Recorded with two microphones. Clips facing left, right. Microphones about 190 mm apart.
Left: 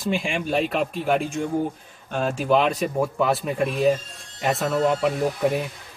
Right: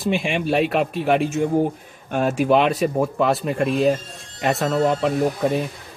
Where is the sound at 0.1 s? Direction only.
5° right (ahead or behind).